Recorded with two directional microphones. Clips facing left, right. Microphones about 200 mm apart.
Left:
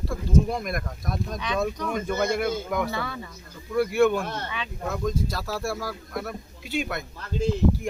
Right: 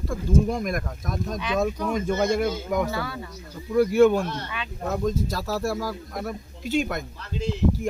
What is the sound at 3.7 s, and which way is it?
Speech, 40° right (ahead or behind).